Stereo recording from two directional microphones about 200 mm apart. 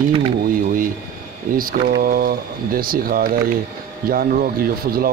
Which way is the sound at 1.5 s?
45° right (ahead or behind).